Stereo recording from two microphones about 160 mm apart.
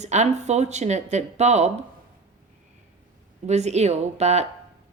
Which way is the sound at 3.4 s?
45° right (ahead or behind).